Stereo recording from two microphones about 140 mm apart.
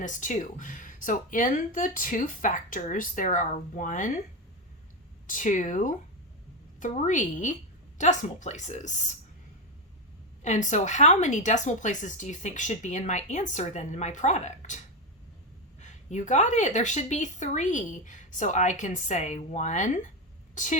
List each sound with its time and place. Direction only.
0.0 s speech: 65° left (ahead or behind)
5.2 s speech: 65° left (ahead or behind)
10.4 s speech: 60° left (ahead or behind)
15.8 s speech: 60° left (ahead or behind)